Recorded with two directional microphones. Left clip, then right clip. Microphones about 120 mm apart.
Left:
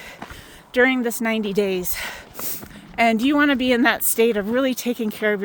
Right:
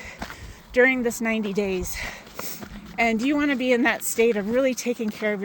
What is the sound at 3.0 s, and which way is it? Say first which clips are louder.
Speech: left 5 dB; 65° left (ahead or behind).